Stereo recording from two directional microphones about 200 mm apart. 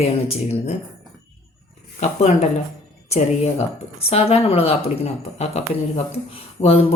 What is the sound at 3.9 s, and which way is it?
A woman's voice, 30° left (ahead or behind).